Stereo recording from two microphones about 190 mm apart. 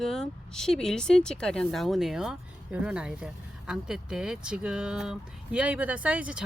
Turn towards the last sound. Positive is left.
turn(degrees=-5)  # may be behind; listen again after turning